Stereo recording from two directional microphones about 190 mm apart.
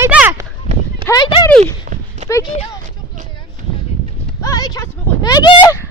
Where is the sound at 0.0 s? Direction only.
10° right (ahead or behind).